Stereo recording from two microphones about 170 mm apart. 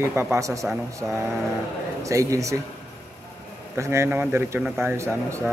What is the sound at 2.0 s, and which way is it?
Speech, 20° right (ahead or behind).